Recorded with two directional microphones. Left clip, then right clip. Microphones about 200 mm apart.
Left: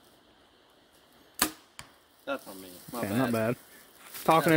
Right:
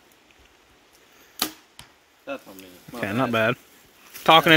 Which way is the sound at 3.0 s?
5° right (ahead or behind).